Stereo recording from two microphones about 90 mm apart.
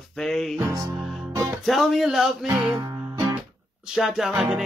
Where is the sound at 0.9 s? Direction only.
Centre (ahead or behind).